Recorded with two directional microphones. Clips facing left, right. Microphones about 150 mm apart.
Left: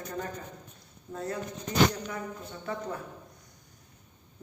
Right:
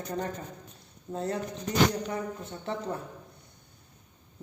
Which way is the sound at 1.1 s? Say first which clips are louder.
Right 4 dB; 25° right (ahead or behind).